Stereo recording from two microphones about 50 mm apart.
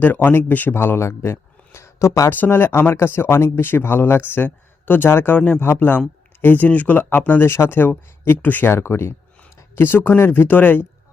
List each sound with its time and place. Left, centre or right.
0.0 s speech: left
0.7 s speech: left
2.3 s speech: left
6.4 s speech: left
7.5 s speech: left
7.8 s speech: left
8.7 s speech: left